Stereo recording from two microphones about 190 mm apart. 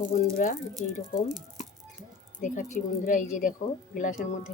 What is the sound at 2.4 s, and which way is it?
Speech, 40° left (ahead or behind).